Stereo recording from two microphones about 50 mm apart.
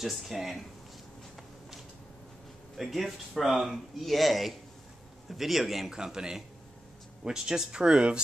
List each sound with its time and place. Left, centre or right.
0.0 s speech: centre
2.8 s speech: centre
5.9 s speech: centre